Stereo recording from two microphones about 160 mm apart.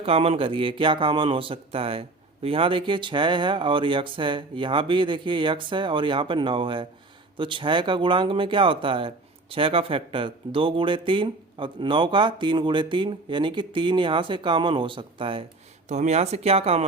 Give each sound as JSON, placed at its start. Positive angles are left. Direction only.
{"t": 0.0, "sound": "speech", "side_deg": -35}
{"t": 15.9, "sound": "speech", "side_deg": -45}